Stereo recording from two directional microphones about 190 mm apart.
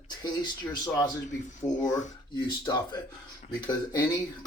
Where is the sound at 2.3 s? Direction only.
20° left (ahead or behind).